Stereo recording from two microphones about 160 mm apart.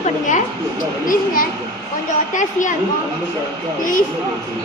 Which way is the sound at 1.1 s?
60° left (ahead or behind).